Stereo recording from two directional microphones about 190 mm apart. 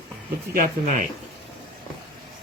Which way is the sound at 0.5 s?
45° right (ahead or behind).